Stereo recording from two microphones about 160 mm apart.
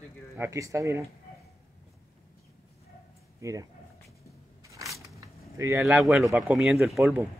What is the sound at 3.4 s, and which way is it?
Speech, 20° right (ahead or behind).